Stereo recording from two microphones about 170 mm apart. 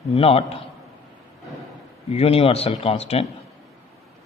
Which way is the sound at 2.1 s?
35° left (ahead or behind).